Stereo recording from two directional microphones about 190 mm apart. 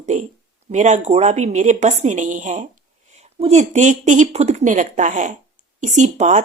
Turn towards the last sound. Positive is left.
turn(degrees=-40)  # may be behind; listen again after turning